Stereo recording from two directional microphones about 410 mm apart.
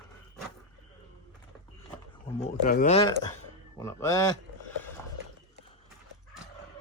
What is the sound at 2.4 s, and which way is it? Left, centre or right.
Speech, centre.